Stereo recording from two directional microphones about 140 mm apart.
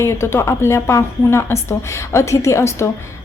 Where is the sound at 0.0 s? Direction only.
20° left (ahead or behind).